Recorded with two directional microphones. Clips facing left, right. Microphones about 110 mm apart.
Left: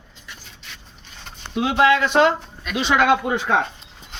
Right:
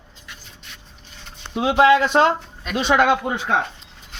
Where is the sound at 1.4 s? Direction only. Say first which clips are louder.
Right 1 dB; 25° right (ahead or behind).